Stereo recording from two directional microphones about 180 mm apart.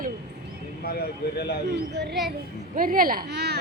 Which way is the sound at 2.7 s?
50° right (ahead or behind).